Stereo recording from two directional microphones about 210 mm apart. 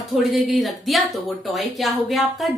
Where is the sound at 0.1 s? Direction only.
Centre (ahead or behind).